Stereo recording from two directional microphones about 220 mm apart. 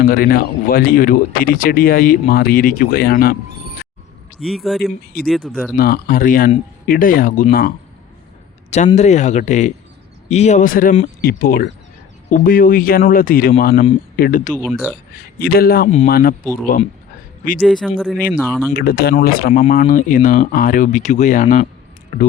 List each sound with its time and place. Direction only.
0.0 s speech: 40° left (ahead or behind)
4.4 s speech: centre (ahead or behind)
5.7 s speech: 40° left (ahead or behind)
8.9 s speech: 30° left (ahead or behind)
14.5 s speech: centre (ahead or behind)
15.1 s speech: 45° left (ahead or behind)
17.6 s speech: centre (ahead or behind)
18.7 s speech: 45° left (ahead or behind)